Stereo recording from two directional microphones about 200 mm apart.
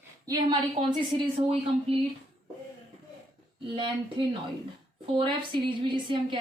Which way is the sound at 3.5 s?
25° right (ahead or behind).